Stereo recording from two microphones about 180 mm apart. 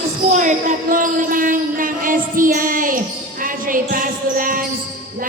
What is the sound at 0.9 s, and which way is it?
Music, 50° right (ahead or behind).